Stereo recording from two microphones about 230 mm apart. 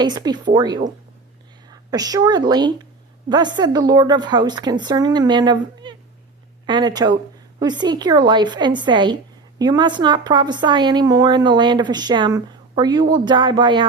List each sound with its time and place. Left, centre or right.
0.0 s a woman's voice: centre